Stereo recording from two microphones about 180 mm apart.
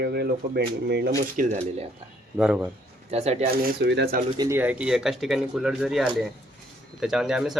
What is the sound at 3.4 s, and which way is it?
Speech, 65° right (ahead or behind).